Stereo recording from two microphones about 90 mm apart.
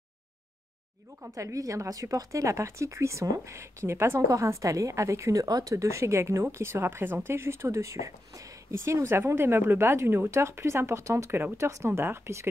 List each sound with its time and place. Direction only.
1.3 s a woman's voice: 35° right (ahead or behind)